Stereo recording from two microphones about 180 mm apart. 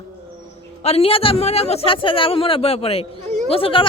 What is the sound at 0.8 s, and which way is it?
A man's voice, 35° left (ahead or behind).